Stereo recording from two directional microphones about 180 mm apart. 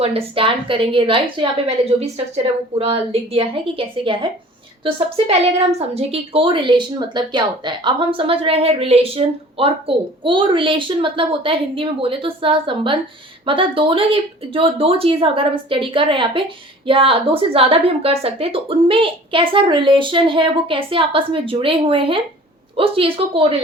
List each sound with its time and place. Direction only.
0.0 s a woman's voice: 30° right (ahead or behind)